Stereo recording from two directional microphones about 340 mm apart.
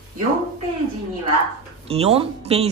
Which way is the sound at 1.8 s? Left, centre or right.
Centre.